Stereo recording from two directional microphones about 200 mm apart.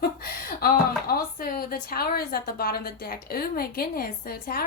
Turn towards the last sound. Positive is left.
turn(degrees=45)  # may be behind; listen again after turning